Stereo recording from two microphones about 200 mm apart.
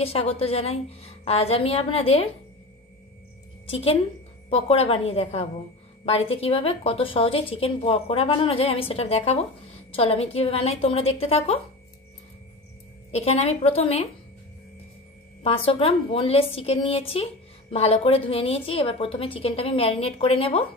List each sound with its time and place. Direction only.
0.0 s a woman's voice: 30° left (ahead or behind)
3.7 s a woman's voice: 30° left (ahead or behind)
13.1 s a woman's voice: 30° left (ahead or behind)
15.4 s a woman's voice: 25° left (ahead or behind)